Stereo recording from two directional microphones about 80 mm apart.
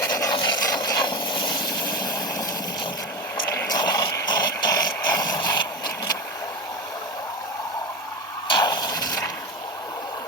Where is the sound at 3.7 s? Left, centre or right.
Left.